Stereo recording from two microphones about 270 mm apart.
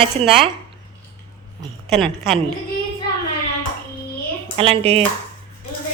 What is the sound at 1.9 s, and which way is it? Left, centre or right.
Speech, centre.